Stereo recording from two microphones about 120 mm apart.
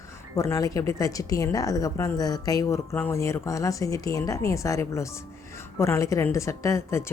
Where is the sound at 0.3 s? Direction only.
25° left (ahead or behind).